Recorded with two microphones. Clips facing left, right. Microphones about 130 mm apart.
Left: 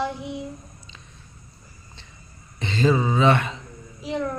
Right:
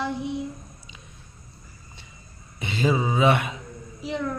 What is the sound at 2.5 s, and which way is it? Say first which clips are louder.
Speech: left 3 dB; 10° right (ahead or behind).